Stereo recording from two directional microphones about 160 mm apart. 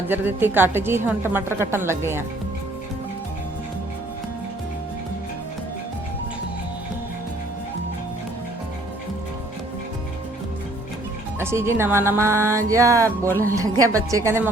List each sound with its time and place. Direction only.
0.1 s a woman's voice: 10° right (ahead or behind)
11.3 s a woman's voice: 15° right (ahead or behind)